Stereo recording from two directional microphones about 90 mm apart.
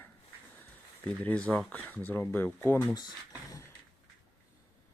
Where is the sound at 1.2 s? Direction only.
15° left (ahead or behind).